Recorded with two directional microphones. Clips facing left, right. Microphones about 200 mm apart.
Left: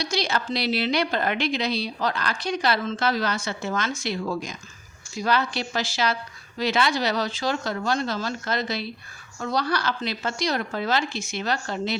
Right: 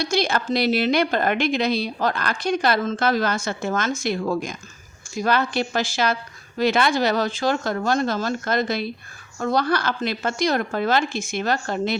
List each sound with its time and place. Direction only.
0.0 s a woman's voice: 50° right (ahead or behind)